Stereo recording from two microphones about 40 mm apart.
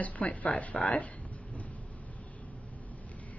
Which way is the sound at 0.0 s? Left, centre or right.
Left.